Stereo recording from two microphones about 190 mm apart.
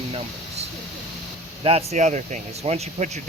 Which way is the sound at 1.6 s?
35° right (ahead or behind).